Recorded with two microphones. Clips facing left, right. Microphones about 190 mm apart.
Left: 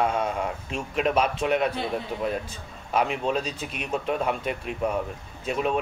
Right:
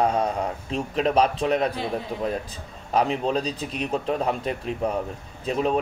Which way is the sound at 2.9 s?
35° right (ahead or behind).